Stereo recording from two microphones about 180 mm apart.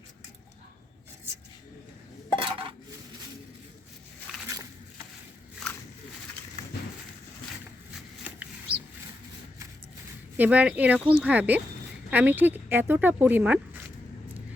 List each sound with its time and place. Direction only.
2.4 s dishes: 30° right (ahead or behind)
10.3 s speech: 10° right (ahead or behind)